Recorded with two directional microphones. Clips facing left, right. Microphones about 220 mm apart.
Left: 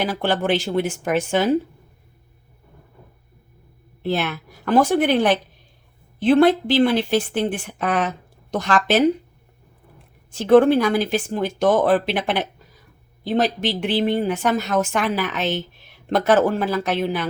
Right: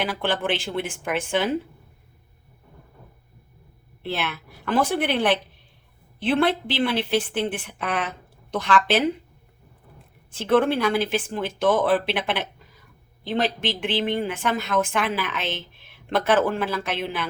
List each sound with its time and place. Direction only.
0.0 s speech: 40° left (ahead or behind)
4.0 s speech: 45° left (ahead or behind)
10.3 s speech: 45° left (ahead or behind)